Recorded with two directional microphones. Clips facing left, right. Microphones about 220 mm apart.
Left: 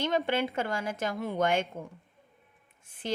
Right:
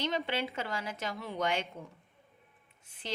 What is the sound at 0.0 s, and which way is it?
Speech, 50° left (ahead or behind).